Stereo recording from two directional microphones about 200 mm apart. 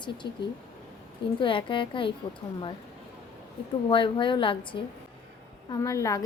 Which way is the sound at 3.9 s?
25° left (ahead or behind).